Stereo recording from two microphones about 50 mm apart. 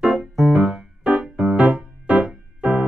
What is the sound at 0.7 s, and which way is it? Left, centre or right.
Music, centre.